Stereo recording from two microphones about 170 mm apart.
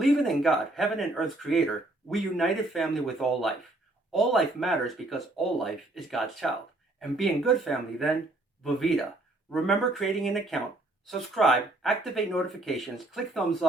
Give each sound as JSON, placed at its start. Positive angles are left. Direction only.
{"t": 0.0, "sound": "speech", "side_deg": 0}